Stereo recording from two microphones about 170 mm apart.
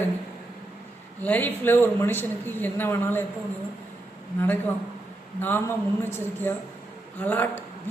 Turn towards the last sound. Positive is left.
turn(degrees=10)  # may be behind; listen again after turning